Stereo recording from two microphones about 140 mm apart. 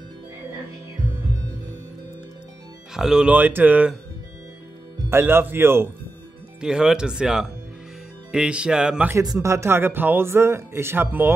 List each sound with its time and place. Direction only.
2.9 s speech: 5° right (ahead or behind)
5.1 s speech: 15° right (ahead or behind)
6.6 s speech: 5° right (ahead or behind)
9.1 s speech: 25° right (ahead or behind)